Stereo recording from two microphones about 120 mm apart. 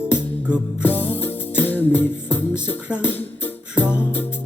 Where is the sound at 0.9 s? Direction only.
15° left (ahead or behind).